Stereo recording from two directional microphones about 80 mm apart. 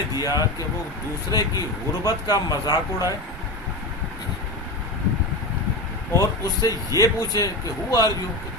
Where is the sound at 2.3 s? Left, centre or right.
Left.